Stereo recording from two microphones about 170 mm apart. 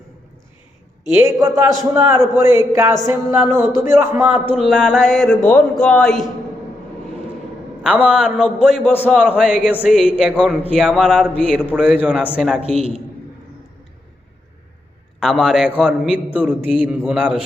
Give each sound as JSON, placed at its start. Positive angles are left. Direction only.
{"t": 1.1, "sound": "a man's voice", "side_deg": -20}
{"t": 7.9, "sound": "a man's voice", "side_deg": -5}
{"t": 15.2, "sound": "a man's voice", "side_deg": 0}